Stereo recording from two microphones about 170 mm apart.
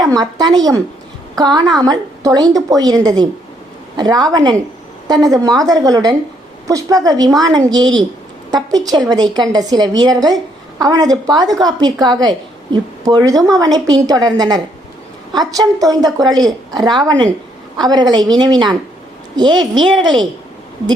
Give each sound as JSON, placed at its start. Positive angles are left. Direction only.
{"t": 0.0, "sound": "a woman's voice", "side_deg": -20}